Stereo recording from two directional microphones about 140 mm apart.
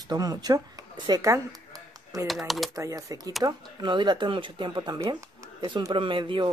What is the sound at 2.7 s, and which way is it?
Speech, 25° right (ahead or behind).